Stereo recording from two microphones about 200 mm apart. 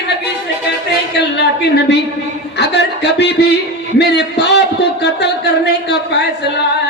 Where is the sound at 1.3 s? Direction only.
55° left (ahead or behind).